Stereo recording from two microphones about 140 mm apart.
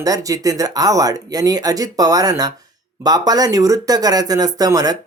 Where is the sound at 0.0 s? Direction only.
25° right (ahead or behind).